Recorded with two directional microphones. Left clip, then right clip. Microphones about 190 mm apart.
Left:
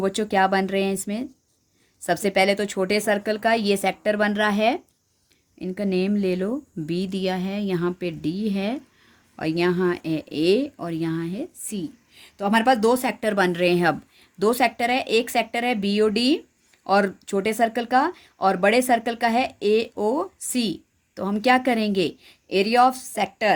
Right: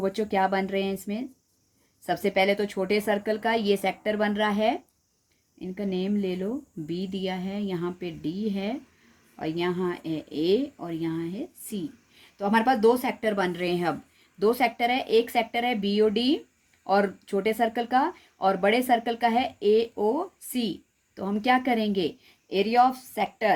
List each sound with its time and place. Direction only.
0.0 s speech: 40° left (ahead or behind)